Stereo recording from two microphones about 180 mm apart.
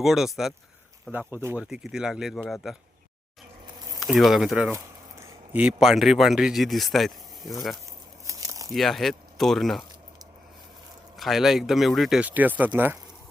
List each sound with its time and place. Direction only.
0.0 s speech: centre (ahead or behind)
1.1 s speech: 10° right (ahead or behind)
1.6 s speech: 5° right (ahead or behind)
4.0 s speech: centre (ahead or behind)
8.3 s a sound: 20° right (ahead or behind)
8.7 s speech: centre (ahead or behind)
11.2 s speech: centre (ahead or behind)